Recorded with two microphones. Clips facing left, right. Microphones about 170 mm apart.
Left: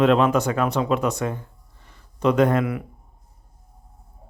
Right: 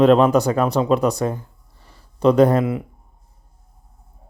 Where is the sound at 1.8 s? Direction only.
35° right (ahead or behind).